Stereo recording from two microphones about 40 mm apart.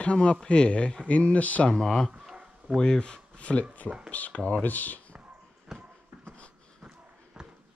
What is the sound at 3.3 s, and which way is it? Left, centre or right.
Speech, left.